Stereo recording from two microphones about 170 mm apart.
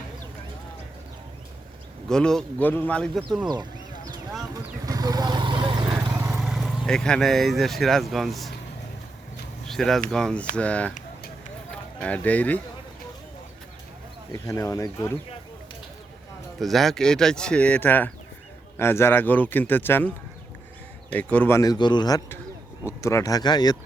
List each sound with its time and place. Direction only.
2.0 s speech: 5° left (ahead or behind)
3.5 s sheep: 25° right (ahead or behind)
4.9 s vehicle: 20° right (ahead or behind)
6.3 s speech: centre (ahead or behind)
9.6 s speech: centre (ahead or behind)
11.9 s speech: 10° left (ahead or behind)
14.3 s speech: 20° left (ahead or behind)
16.6 s speech: centre (ahead or behind)
21.1 s speech: 10° left (ahead or behind)